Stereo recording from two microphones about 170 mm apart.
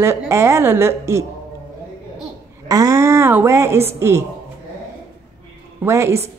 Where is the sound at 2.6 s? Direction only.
20° right (ahead or behind).